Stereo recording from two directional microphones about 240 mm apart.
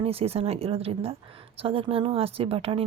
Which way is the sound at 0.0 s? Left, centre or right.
Right.